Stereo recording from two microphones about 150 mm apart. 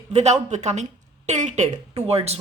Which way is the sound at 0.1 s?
50° right (ahead or behind).